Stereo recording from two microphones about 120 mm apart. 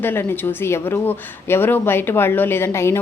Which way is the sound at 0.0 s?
20° left (ahead or behind).